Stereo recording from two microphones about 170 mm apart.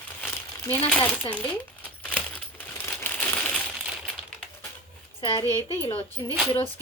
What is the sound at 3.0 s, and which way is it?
Crumpling, 10° left (ahead or behind).